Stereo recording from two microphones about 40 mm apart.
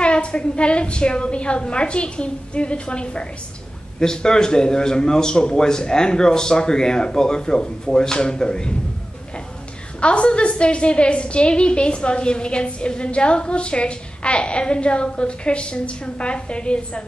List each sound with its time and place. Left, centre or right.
0.0 s a woman's voice: left
4.0 s a man's voice: centre
9.9 s a woman's voice: left